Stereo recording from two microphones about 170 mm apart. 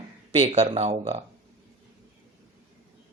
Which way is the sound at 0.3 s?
40° right (ahead or behind).